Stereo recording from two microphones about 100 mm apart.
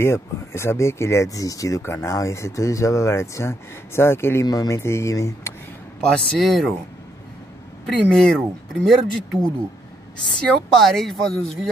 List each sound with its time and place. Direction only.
0.0 s speech: 25° left (ahead or behind)
6.0 s speech: 5° left (ahead or behind)
7.8 s speech: 5° left (ahead or behind)
10.8 s speech: 5° left (ahead or behind)